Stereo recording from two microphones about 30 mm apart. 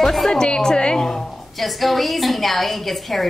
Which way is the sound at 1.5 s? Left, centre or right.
Centre.